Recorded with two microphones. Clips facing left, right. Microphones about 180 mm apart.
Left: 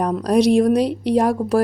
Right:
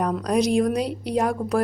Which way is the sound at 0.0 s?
30° left (ahead or behind).